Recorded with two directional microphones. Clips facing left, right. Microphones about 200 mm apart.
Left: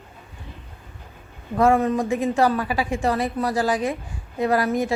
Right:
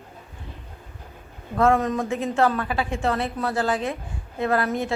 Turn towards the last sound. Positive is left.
turn(degrees=10)  # may be behind; listen again after turning